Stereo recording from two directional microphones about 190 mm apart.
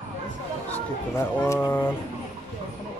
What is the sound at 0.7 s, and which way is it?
Speech, 10° left (ahead or behind).